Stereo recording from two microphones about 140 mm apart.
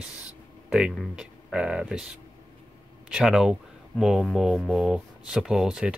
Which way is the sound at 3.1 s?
5° right (ahead or behind).